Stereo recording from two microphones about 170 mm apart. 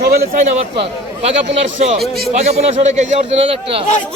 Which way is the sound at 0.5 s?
35° right (ahead or behind).